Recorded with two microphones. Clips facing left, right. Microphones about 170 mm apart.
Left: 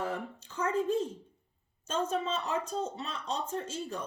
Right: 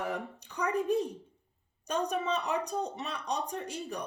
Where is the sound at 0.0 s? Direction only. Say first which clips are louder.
Even; 15° right (ahead or behind).